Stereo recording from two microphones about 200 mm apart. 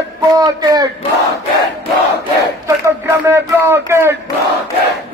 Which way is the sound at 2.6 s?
15° right (ahead or behind).